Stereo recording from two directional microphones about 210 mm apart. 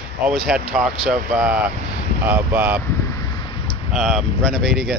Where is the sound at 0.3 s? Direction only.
Centre (ahead or behind).